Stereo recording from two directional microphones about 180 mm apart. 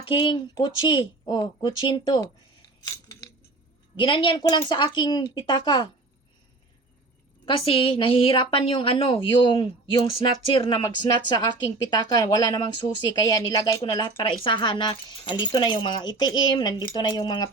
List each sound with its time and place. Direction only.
0.0 s a woman's voice: 25° left (ahead or behind)
2.8 s a sound: 15° left (ahead or behind)
3.9 s a woman's voice: 25° left (ahead or behind)
7.4 s a woman's voice: 30° left (ahead or behind)